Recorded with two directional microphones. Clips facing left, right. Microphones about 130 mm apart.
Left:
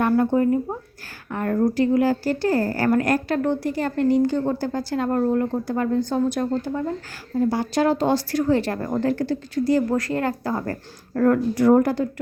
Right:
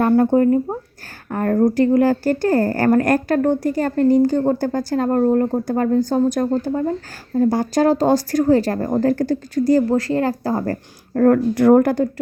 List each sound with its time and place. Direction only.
0.0 s a woman's voice: 35° right (ahead or behind)
11.5 s speech: 60° right (ahead or behind)